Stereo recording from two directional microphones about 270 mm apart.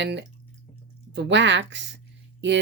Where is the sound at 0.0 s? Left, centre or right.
Right.